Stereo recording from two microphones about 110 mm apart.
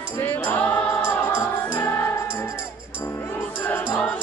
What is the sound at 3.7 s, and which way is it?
Music, 15° left (ahead or behind).